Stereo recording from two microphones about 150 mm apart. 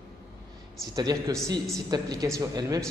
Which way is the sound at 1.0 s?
25° right (ahead or behind).